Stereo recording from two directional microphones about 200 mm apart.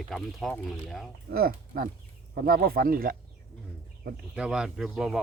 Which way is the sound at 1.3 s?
50° right (ahead or behind).